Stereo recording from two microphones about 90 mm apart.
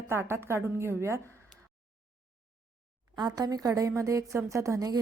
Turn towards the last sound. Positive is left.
turn(degrees=-40)  # may be behind; listen again after turning